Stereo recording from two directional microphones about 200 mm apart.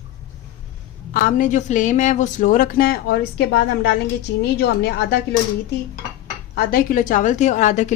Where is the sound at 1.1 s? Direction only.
40° left (ahead or behind).